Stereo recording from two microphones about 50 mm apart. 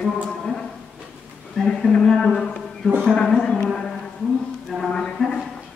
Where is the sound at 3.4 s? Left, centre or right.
Left.